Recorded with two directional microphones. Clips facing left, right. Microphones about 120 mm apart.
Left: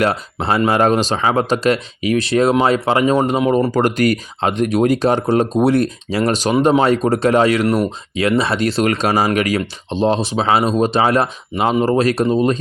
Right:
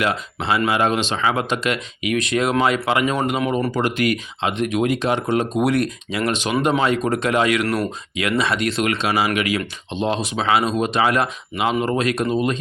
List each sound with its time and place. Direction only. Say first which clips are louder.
0.0 s speech: left 4 dB; 40° left (ahead or behind)
3.7 s speech: left 5 dB; 40° left (ahead or behind)